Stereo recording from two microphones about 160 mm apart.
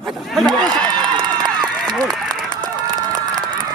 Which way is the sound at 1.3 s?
25° right (ahead or behind).